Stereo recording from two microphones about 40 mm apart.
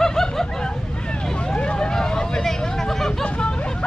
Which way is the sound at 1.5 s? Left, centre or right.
Left.